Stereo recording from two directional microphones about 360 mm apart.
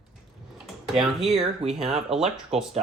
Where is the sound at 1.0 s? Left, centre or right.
Centre.